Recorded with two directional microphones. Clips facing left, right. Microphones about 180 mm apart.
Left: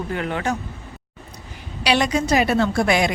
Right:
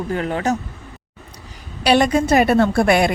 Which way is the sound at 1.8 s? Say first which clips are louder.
Right 5 dB; 50° right (ahead or behind).